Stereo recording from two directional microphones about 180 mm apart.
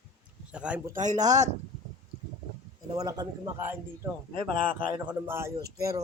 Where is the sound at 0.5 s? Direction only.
5° right (ahead or behind).